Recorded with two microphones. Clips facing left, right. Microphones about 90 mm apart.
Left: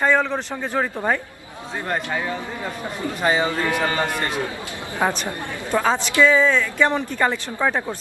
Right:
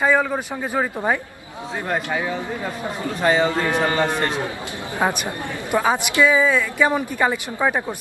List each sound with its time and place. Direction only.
0.0 s speech: 10° right (ahead or behind)
3.2 s a man's voice: 10° left (ahead or behind)
3.5 s speech: 30° right (ahead or behind)
3.8 s speech: 20° right (ahead or behind)